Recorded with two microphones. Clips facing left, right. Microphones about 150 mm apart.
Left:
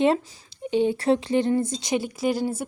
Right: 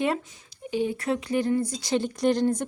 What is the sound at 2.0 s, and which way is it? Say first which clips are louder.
Speech: right 2 dB; 5° left (ahead or behind).